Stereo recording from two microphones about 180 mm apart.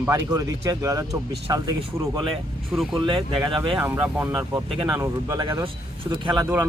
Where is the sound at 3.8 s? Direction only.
10° right (ahead or behind).